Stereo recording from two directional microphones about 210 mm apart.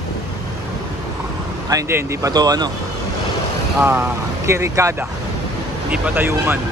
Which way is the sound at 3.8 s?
10° right (ahead or behind).